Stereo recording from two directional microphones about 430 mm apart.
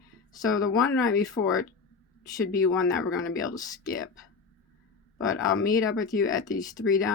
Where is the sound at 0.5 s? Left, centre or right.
Left.